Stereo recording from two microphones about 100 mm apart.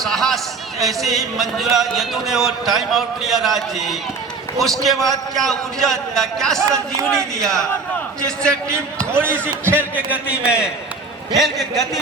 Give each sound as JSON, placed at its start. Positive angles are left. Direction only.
{"t": 0.0, "sound": "a sound", "side_deg": 5}
{"t": 0.8, "sound": "a man's voice", "side_deg": 0}
{"t": 9.7, "sound": "a man's voice", "side_deg": -15}
{"t": 11.3, "sound": "a man's voice", "side_deg": 0}